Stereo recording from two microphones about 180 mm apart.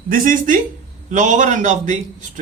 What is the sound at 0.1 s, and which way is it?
Speech, 50° right (ahead or behind).